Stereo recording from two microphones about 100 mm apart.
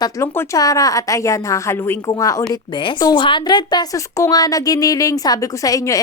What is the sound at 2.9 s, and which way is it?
Speech, 45° left (ahead or behind).